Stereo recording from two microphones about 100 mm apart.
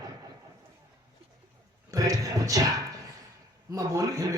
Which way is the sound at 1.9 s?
35° right (ahead or behind).